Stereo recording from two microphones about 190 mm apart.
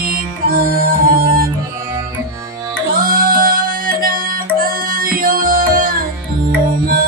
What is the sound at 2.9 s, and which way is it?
Music, 50° right (ahead or behind).